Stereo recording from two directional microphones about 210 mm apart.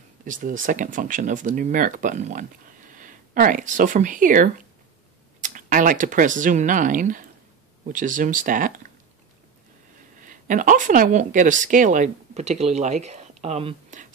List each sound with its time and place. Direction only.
0.2 s speech: 40° right (ahead or behind)
10.2 s speech: 40° right (ahead or behind)